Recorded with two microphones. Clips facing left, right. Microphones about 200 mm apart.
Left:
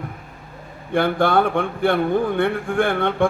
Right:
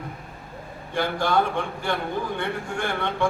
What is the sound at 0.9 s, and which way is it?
A man's voice, 55° left (ahead or behind).